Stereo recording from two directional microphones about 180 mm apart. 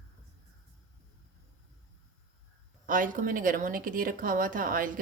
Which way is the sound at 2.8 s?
50° right (ahead or behind).